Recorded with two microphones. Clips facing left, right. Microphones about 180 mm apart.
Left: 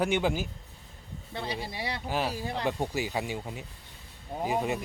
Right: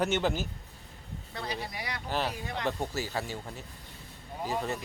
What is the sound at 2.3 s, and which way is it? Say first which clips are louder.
Speech: left 4 dB; 30° left (ahead or behind).